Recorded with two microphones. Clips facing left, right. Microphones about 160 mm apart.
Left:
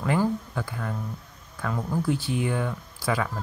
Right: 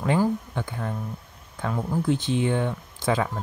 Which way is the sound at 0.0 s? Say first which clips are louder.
Right 2 dB; 20° right (ahead or behind).